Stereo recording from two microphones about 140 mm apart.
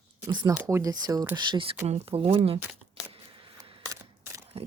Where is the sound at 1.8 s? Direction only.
50° right (ahead or behind).